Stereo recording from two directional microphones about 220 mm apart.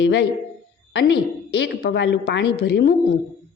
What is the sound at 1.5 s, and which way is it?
A woman's voice, 50° left (ahead or behind).